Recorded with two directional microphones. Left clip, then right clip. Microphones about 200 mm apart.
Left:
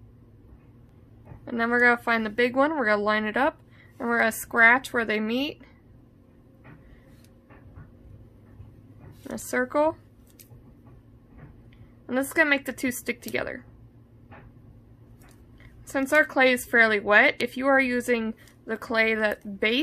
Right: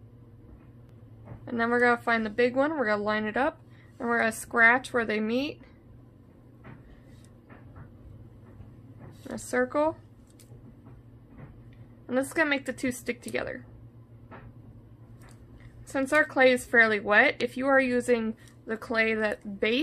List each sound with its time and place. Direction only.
1.4 s speech: 15° left (ahead or behind)
9.3 s speech: 20° left (ahead or behind)
12.1 s speech: 20° left (ahead or behind)
15.9 s speech: 20° left (ahead or behind)